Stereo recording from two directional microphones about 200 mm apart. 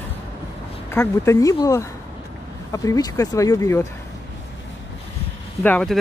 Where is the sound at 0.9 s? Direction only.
15° left (ahead or behind).